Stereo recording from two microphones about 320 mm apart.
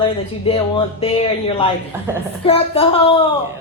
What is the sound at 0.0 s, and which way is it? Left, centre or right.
Speech, centre.